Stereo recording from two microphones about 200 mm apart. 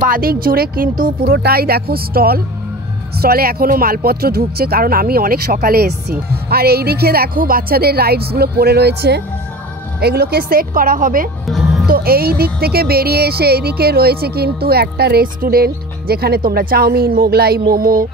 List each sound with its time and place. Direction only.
0.0 s speech: 45° right (ahead or behind)
11.4 s music: centre (ahead or behind)
11.9 s speech: 50° right (ahead or behind)